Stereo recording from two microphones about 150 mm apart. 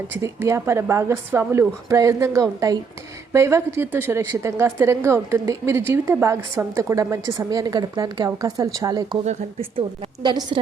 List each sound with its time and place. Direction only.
0.2 s a woman's voice: 20° right (ahead or behind)
9.2 s a woman's voice: 45° right (ahead or behind)